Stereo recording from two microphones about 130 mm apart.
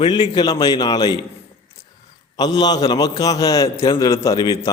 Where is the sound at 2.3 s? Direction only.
30° left (ahead or behind).